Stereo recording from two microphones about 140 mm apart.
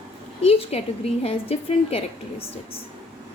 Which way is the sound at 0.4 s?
45° left (ahead or behind).